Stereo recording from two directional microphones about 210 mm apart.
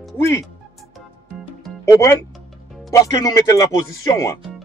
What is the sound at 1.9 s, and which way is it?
Speech, 15° left (ahead or behind).